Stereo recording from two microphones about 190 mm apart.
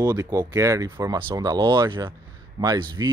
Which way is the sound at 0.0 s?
20° right (ahead or behind).